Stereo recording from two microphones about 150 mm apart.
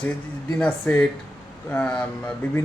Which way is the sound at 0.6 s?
5° left (ahead or behind).